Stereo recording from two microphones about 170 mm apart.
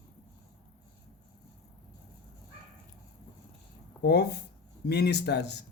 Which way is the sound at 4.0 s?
75° left (ahead or behind).